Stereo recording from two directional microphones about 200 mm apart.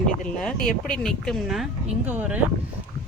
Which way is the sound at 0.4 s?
5° left (ahead or behind).